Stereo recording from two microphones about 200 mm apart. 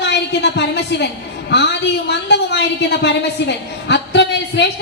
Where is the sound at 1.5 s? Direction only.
60° left (ahead or behind).